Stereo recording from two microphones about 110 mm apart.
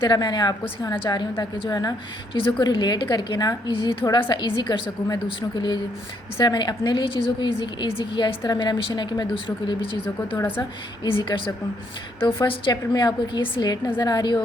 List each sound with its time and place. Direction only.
0.0 s a woman's voice: 40° left (ahead or behind)
10.2 s a woman's voice: 20° left (ahead or behind)
11.0 s a woman's voice: 40° left (ahead or behind)
12.7 s a woman's voice: 40° left (ahead or behind)